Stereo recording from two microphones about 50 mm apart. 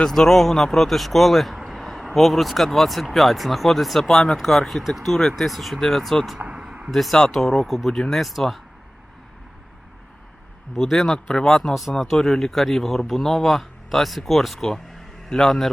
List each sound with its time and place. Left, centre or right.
0.1 s speech: centre
6.5 s a sound: centre
6.9 s speech: centre
10.8 s speech: centre
11.7 s speech: centre